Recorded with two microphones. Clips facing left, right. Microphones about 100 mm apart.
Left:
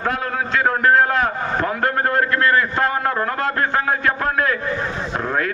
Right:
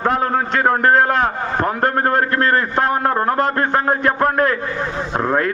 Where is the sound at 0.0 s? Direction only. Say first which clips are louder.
Right 5 dB; 35° right (ahead or behind).